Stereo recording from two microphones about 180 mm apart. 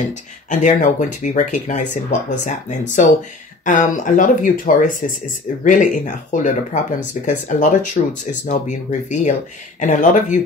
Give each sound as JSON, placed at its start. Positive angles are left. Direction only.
{"t": 0.5, "sound": "speech", "side_deg": 45}